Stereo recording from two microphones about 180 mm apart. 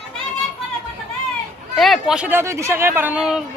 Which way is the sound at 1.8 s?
Centre (ahead or behind).